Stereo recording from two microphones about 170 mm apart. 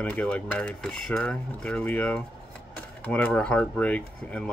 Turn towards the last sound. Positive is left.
turn(degrees=10)  # may be behind; listen again after turning